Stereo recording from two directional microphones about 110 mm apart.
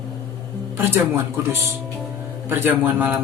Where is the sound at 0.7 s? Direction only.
20° right (ahead or behind).